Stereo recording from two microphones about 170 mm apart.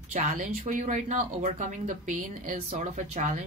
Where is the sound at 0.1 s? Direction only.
50° right (ahead or behind).